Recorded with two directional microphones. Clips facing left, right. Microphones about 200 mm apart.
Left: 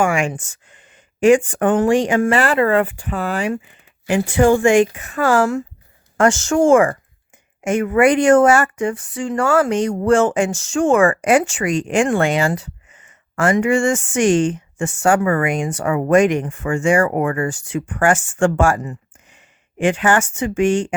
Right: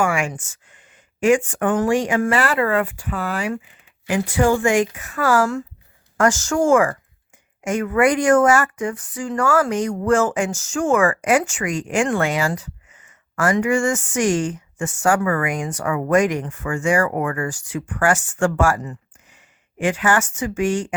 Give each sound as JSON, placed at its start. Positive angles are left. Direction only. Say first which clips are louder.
{"t": 0.0, "sound": "speech", "louder": "left 3 dB", "side_deg": 30}
{"t": 0.5, "sound": "a sound", "louder": "left 3 dB", "side_deg": 30}
{"t": 1.5, "sound": "speech", "louder": "left 4 dB", "side_deg": 30}